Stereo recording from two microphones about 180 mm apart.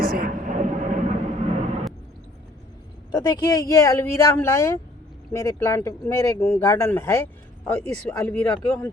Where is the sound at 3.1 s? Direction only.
20° left (ahead or behind).